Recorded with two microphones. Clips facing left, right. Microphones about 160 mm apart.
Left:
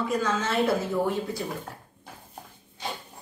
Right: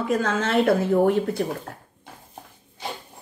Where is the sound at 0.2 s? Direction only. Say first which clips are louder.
Right 4 dB; 55° right (ahead or behind).